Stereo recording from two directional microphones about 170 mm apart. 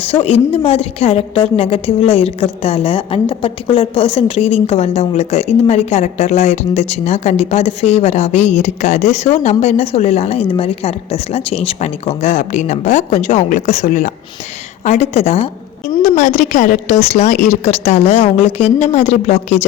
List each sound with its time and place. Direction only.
0.0 s a woman's voice: 35° left (ahead or behind)